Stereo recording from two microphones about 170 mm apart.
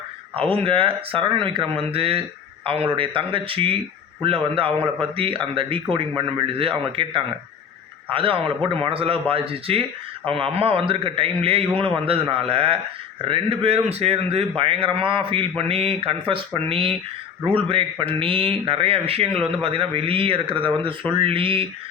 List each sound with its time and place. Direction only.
0.4 s a man's voice: 30° right (ahead or behind)